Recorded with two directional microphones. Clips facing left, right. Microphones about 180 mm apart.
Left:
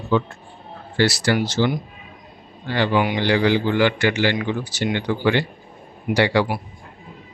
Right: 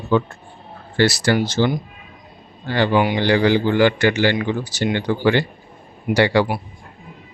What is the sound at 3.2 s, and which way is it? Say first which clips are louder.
Speech: right 2 dB; 45° right (ahead or behind).